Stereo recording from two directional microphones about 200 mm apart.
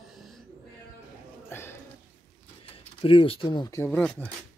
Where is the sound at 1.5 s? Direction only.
10° left (ahead or behind).